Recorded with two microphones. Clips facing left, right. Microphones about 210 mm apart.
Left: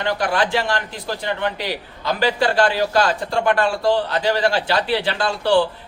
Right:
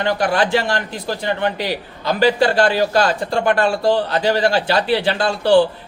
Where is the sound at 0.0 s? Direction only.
40° right (ahead or behind).